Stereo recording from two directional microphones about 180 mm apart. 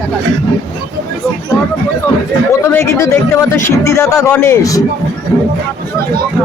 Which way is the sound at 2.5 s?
15° left (ahead or behind).